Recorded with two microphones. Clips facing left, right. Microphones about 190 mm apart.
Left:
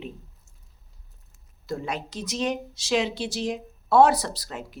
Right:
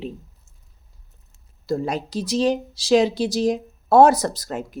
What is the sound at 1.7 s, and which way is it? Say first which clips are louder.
Speech: right 7 dB; 35° right (ahead or behind).